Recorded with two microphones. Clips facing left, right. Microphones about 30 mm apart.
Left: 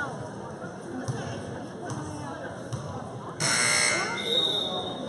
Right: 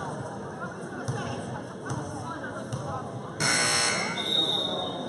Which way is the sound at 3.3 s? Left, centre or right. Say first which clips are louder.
Even; centre.